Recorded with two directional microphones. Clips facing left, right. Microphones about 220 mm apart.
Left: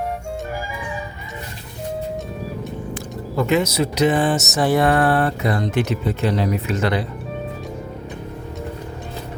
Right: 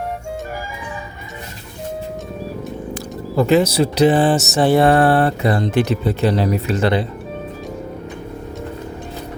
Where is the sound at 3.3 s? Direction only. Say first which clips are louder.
Right 4 dB; 35° right (ahead or behind).